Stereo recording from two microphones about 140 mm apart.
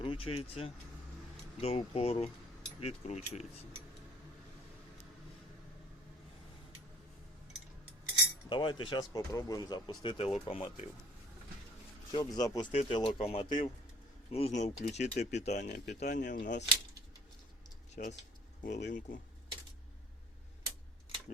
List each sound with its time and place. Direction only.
0.0 s speech: 40° left (ahead or behind)
8.4 s speech: 35° left (ahead or behind)
12.1 s speech: 30° left (ahead or behind)
12.7 s speech: 40° left (ahead or behind); by 16.6 s 65° left (ahead or behind)
17.9 s speech: 55° left (ahead or behind)